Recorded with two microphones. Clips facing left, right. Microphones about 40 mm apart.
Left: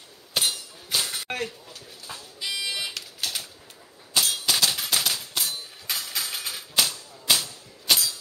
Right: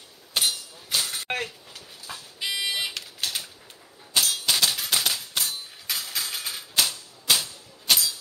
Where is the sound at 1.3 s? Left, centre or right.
Right.